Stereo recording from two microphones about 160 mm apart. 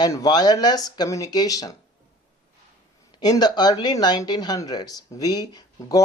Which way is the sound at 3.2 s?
25° left (ahead or behind).